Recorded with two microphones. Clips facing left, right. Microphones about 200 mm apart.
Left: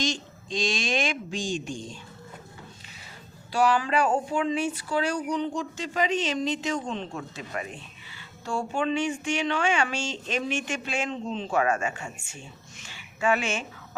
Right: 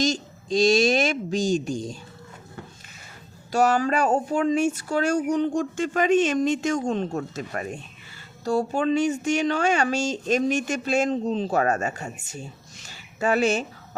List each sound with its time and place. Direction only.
0.0 s speech: 40° right (ahead or behind)
3.5 s speech: 45° right (ahead or behind)